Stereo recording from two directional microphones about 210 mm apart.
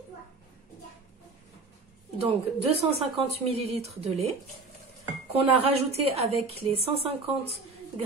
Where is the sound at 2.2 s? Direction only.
30° right (ahead or behind).